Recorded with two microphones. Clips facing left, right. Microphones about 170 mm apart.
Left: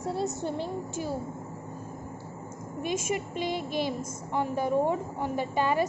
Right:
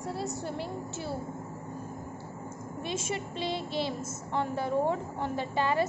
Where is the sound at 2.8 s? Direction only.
10° left (ahead or behind).